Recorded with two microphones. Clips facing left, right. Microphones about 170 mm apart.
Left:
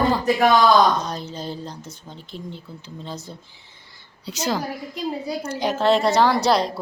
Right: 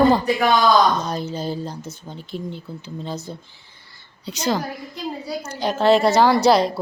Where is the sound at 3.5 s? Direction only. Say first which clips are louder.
Left 1 dB; 20° left (ahead or behind).